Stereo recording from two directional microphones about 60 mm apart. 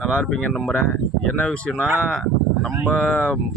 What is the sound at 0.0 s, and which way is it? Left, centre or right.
Speech, centre.